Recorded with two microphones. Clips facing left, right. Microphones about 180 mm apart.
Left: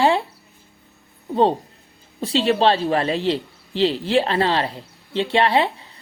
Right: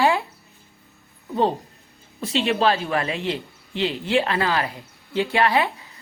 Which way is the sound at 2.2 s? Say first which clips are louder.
Left 3 dB; 35° left (ahead or behind).